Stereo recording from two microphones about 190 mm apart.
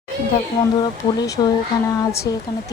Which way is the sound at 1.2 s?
20° left (ahead or behind).